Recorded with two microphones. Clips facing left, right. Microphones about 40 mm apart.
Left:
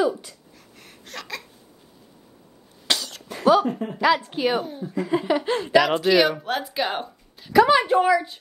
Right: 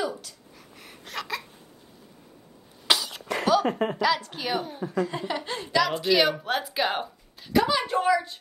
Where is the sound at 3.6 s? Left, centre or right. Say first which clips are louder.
Right 2 dB; right.